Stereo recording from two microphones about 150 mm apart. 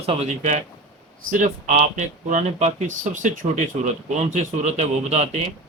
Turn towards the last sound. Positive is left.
turn(degrees=-50)  # may be behind; listen again after turning